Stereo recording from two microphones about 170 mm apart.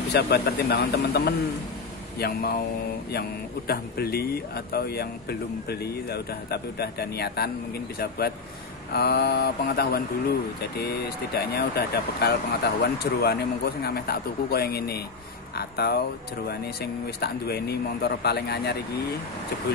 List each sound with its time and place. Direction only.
0.1 s speech: 65° left (ahead or behind)
8.9 s speech: 70° left (ahead or behind)